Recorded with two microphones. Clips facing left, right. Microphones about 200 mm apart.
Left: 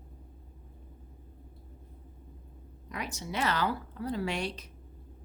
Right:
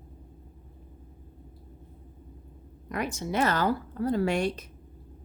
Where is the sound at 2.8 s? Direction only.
55° right (ahead or behind).